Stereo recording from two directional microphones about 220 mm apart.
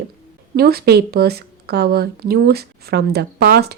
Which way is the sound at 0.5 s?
45° right (ahead or behind).